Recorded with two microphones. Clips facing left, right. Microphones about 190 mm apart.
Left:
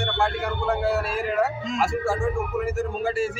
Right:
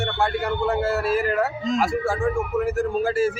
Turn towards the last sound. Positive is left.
turn(degrees=0)  # may be behind; listen again after turning